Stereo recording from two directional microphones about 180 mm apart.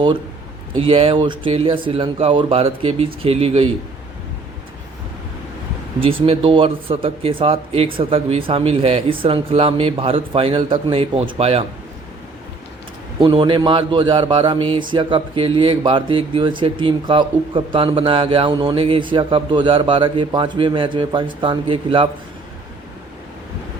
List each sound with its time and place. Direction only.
0.8 s speech: 30° right (ahead or behind)
6.0 s speech: 30° right (ahead or behind)
13.1 s speech: 25° right (ahead or behind)